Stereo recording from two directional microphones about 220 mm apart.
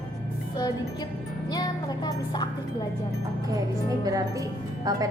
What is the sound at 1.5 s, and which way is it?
Speech, 20° left (ahead or behind).